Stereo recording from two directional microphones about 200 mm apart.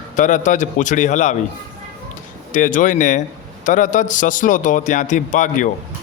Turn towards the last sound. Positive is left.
turn(degrees=40)  # may be behind; listen again after turning